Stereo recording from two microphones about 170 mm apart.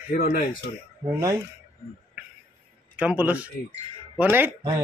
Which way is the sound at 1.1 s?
20° right (ahead or behind).